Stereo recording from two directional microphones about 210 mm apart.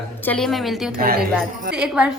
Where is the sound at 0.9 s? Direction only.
45° right (ahead or behind).